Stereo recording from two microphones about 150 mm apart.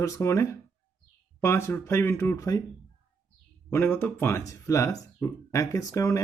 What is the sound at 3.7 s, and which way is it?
Speech, 15° left (ahead or behind).